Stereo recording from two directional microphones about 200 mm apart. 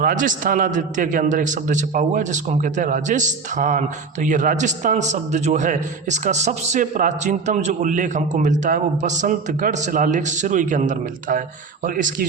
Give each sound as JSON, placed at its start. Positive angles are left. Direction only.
{"t": 0.0, "sound": "a man's voice", "side_deg": -45}